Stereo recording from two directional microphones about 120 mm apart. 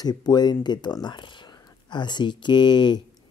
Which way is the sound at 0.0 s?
35° left (ahead or behind).